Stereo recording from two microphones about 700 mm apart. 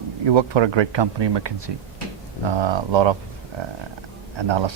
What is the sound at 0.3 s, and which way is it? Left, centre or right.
Speech, right.